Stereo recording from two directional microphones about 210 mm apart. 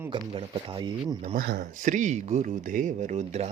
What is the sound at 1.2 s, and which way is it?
Speech, 40° right (ahead or behind).